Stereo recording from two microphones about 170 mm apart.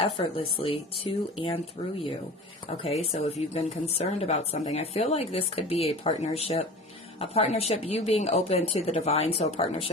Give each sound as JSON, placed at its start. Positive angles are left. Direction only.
{"t": 0.0, "sound": "speech", "side_deg": 35}